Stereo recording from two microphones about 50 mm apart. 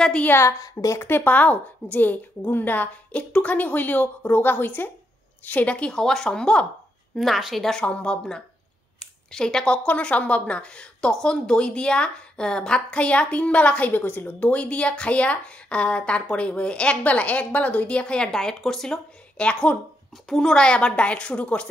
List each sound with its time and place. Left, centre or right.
0.3 s a woman's voice: left
1.2 s a woman's voice: left
5.8 s speech: centre
7.2 s a woman's voice: centre
7.8 s speech: left
9.0 s a sound: centre
9.8 s a woman's voice: left; by 18.9 s centre
19.3 s a woman's voice: left
20.2 s a woman's voice: centre